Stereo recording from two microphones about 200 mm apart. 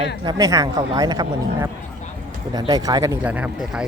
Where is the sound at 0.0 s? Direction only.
20° right (ahead or behind).